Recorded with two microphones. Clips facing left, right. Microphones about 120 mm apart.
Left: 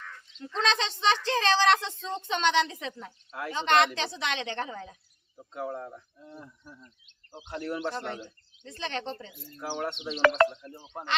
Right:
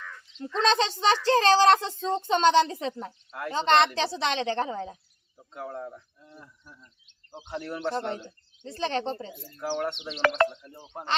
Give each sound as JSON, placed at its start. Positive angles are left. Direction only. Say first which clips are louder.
{"t": 0.3, "sound": "speech", "louder": "right 5 dB", "side_deg": -40}
{"t": 5.5, "sound": "speech", "louder": "left 1 dB", "side_deg": 0}
{"t": 6.2, "sound": "speech", "louder": "left 4 dB", "side_deg": 25}
{"t": 7.5, "sound": "speech", "louder": "right 1 dB", "side_deg": 0}
{"t": 8.6, "sound": "speech", "louder": "right 6 dB", "side_deg": -35}
{"t": 9.6, "sound": "speech", "louder": "right 3 dB", "side_deg": 5}